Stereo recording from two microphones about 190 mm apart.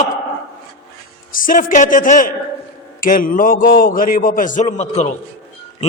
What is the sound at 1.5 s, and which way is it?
A man's voice, 45° left (ahead or behind).